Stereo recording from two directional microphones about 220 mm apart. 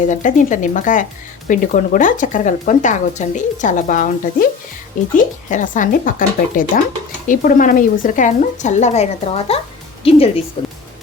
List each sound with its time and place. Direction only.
0.0 s a woman's voice: 35° left (ahead or behind)